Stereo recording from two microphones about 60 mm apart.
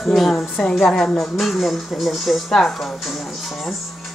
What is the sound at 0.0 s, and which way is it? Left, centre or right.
A woman's voice, centre.